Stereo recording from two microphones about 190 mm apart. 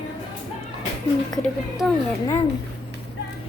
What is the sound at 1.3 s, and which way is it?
Speech, centre (ahead or behind).